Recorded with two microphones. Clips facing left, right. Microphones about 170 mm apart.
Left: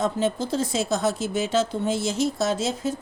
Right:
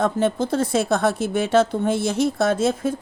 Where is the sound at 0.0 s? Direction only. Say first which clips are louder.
Right 4 dB; 55° right (ahead or behind).